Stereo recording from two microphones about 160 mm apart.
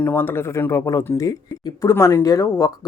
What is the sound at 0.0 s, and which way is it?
Speech, 10° left (ahead or behind).